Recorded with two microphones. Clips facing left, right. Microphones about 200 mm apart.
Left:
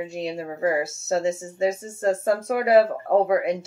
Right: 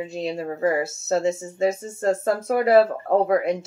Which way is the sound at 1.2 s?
15° left (ahead or behind).